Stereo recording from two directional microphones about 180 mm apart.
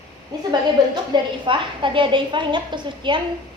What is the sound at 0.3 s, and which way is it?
A woman's voice, 20° right (ahead or behind).